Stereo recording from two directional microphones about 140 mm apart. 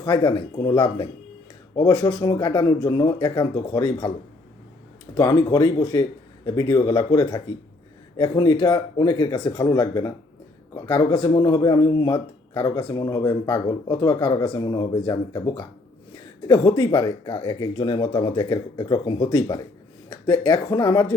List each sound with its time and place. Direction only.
0.0 s speech: 30° left (ahead or behind)
5.1 s speech: 25° left (ahead or behind)